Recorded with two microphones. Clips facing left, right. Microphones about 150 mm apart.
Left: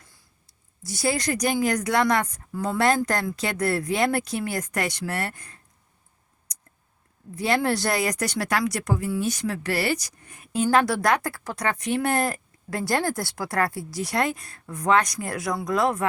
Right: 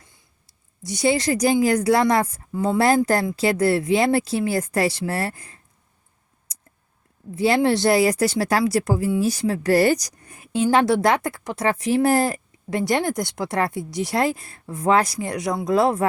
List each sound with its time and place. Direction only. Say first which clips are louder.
0.9 s speech: right 5 dB; 20° right (ahead or behind)
7.3 s speech: right 5 dB; 25° right (ahead or behind)